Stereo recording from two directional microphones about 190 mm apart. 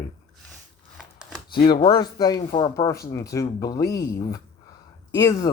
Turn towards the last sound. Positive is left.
turn(degrees=15)  # may be behind; listen again after turning